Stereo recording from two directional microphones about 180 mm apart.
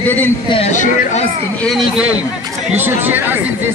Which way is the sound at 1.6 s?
Centre (ahead or behind).